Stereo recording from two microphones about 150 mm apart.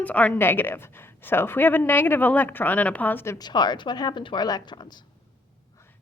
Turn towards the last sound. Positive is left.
turn(degrees=30)  # may be behind; listen again after turning